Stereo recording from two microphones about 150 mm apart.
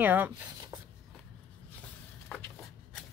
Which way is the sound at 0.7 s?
25° right (ahead or behind).